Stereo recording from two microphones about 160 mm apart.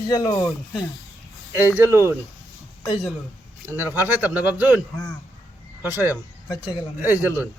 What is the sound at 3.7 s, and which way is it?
Speech, 15° right (ahead or behind).